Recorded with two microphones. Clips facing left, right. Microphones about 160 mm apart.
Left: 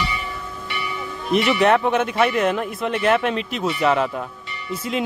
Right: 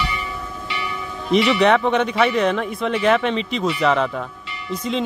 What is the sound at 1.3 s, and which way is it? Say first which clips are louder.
Speech: right 1 dB; 5° left (ahead or behind).